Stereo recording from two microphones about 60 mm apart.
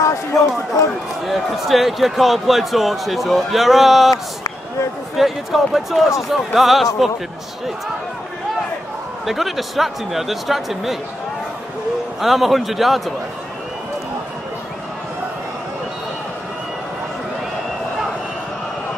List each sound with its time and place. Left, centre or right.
0.0 s speech: left
1.2 s speech: centre
5.1 s speech: centre
9.2 s speech: centre
12.2 s speech: centre